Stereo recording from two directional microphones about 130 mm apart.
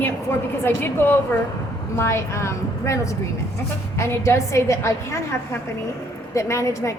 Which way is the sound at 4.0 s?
20° left (ahead or behind).